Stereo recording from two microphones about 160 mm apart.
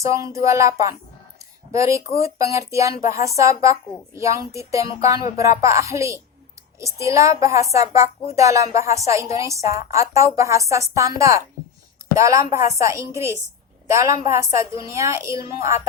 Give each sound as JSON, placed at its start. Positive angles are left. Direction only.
{"t": 0.0, "sound": "a woman's voice", "side_deg": -20}